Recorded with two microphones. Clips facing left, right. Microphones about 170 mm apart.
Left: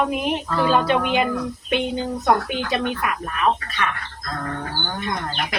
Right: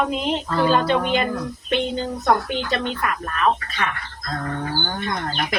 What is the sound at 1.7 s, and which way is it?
Speech, 10° left (ahead or behind).